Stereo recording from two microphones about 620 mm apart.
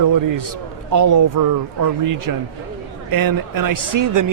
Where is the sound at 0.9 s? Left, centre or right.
Right.